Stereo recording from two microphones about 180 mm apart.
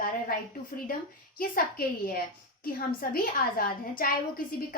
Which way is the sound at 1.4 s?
50° left (ahead or behind).